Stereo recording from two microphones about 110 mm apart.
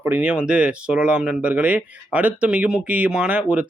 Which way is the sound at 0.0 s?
15° right (ahead or behind).